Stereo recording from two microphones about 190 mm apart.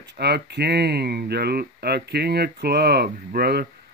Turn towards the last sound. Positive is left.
turn(degrees=-55)  # may be behind; listen again after turning